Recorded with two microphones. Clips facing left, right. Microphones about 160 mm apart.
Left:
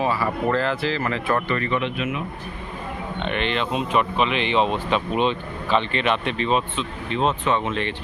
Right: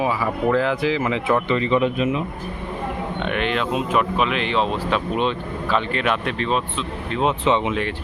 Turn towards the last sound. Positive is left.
turn(degrees=-5)  # may be behind; listen again after turning